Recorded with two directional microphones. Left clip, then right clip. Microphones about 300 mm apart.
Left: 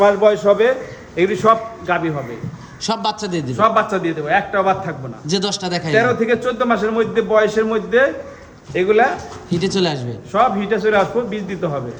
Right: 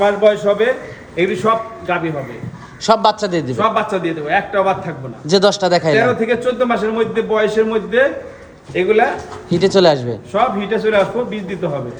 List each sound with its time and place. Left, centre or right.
0.0 s a man's voice: left
1.1 s a man's voice: centre
3.6 s speech: centre